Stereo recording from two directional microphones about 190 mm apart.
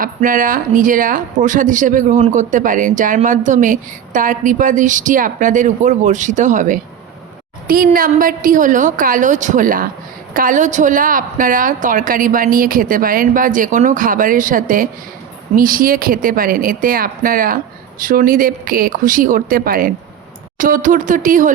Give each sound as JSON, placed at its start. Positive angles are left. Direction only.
{"t": 0.0, "sound": "a woman's voice", "side_deg": -45}
{"t": 7.9, "sound": "a woman's voice", "side_deg": -45}